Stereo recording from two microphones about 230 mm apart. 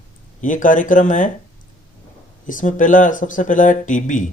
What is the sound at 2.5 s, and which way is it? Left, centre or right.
Speech, left.